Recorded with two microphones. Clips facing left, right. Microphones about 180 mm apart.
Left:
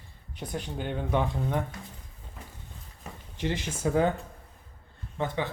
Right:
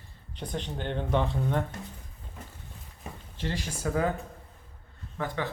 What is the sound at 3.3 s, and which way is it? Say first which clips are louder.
Speech: left 3 dB; 20° left (ahead or behind).